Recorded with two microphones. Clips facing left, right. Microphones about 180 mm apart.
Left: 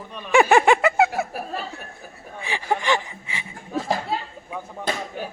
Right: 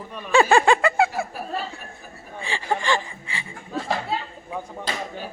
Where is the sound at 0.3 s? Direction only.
15° left (ahead or behind).